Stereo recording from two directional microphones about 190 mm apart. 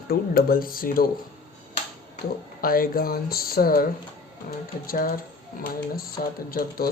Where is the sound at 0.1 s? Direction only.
50° left (ahead or behind).